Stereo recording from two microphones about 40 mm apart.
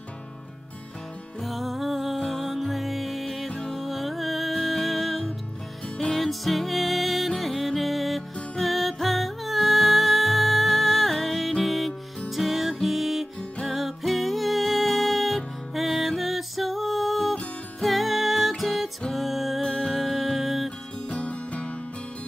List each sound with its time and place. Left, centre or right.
1.4 s music: centre
21.1 s music: left